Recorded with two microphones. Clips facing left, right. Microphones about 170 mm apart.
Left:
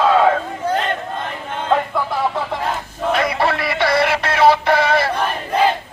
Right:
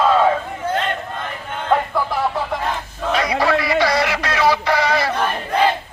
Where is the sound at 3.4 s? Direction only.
60° left (ahead or behind).